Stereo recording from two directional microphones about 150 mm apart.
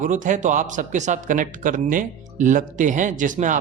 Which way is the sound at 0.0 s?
60° right (ahead or behind).